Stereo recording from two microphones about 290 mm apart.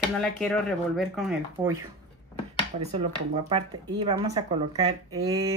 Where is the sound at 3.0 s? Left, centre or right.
Centre.